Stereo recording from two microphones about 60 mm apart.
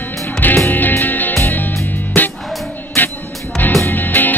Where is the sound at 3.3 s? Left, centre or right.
Centre.